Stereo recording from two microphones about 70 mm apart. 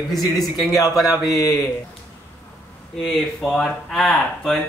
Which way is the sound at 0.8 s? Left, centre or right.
Left.